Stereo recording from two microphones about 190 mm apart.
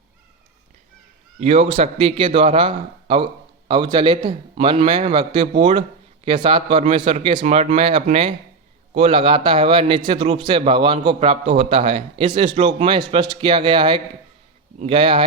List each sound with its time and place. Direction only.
1.4 s a man's voice: 35° right (ahead or behind)
4.2 s a man's voice: 40° right (ahead or behind)
4.6 s speech: 30° right (ahead or behind)